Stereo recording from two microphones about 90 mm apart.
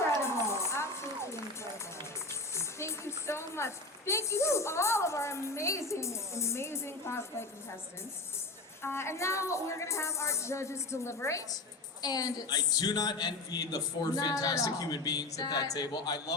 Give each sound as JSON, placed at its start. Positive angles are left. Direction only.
{"t": 0.2, "sound": "music", "side_deg": 30}
{"t": 2.6, "sound": "a sound", "side_deg": 30}
{"t": 8.8, "sound": "a woman's voice", "side_deg": 25}
{"t": 12.0, "sound": "a man's voice", "side_deg": 45}